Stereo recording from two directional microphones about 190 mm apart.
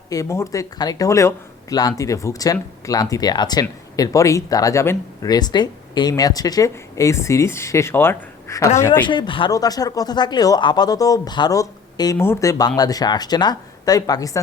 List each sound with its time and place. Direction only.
0.1 s speech: 15° left (ahead or behind)
9.0 s speech: 25° left (ahead or behind)